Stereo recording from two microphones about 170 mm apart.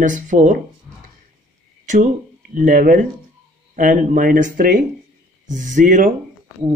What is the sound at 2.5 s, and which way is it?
Speech, 50° right (ahead or behind).